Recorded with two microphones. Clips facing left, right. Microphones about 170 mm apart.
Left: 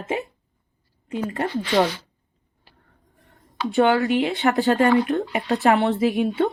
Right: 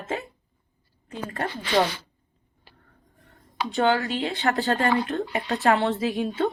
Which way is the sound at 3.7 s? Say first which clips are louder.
Left 5 dB; 20° left (ahead or behind).